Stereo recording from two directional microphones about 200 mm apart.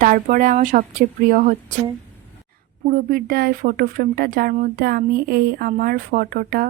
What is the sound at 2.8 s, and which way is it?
Speech, 45° right (ahead or behind).